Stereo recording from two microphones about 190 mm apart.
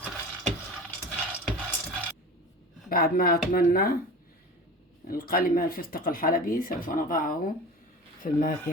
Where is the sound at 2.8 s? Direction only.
50° left (ahead or behind).